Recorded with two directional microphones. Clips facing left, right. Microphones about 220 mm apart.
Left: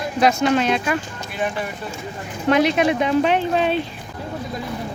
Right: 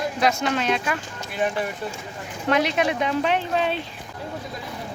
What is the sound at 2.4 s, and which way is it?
Speech, 15° left (ahead or behind).